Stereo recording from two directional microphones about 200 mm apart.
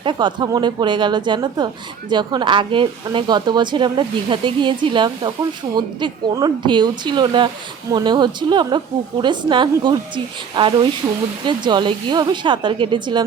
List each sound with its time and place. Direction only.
0.0 s a woman's voice: 25° right (ahead or behind)
11.0 s a woman's voice: 15° right (ahead or behind)